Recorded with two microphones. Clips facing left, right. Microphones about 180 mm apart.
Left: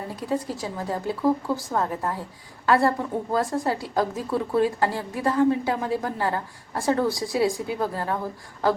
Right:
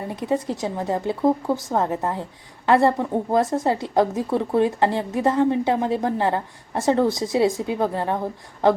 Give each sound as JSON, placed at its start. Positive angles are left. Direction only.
{"t": 0.1, "sound": "a woman's voice", "side_deg": -20}